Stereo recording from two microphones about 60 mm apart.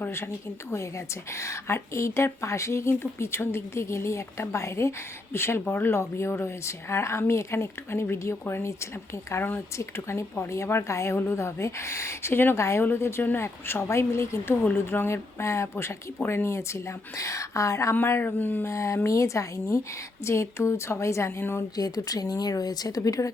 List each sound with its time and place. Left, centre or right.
0.7 s speech: left
5.6 s speech: left
5.9 s speech: left
12.5 s speech: left
16.5 s speech: left
17.9 s speech: left
18.7 s speech: left
21.2 s speech: left
21.8 s speech: left